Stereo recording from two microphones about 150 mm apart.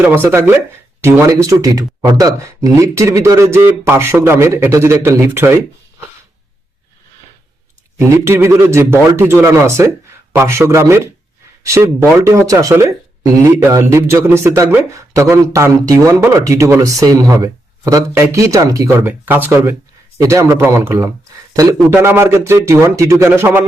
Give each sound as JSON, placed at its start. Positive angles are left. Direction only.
{"t": 0.0, "sound": "speech", "side_deg": -15}
{"t": 7.9, "sound": "speech", "side_deg": -15}